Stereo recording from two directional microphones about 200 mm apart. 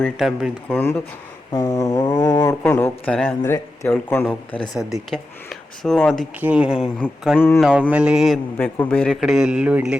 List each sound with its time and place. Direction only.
0.0 s a man's voice: centre (ahead or behind)
0.7 s a man's voice: 10° left (ahead or behind)
1.5 s mantra: 15° left (ahead or behind)
2.6 s a man's voice: 10° left (ahead or behind)
4.6 s a man's voice: centre (ahead or behind)
7.0 s a man's voice: 10° left (ahead or behind)
7.6 s a man's voice: 5° right (ahead or behind)
8.5 s a man's voice: 10° left (ahead or behind)